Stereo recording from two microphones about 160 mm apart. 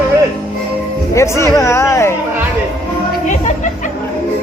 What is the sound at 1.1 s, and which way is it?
Speech, 20° left (ahead or behind).